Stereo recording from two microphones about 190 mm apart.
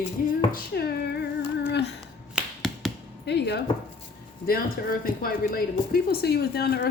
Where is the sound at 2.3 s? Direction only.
Centre (ahead or behind).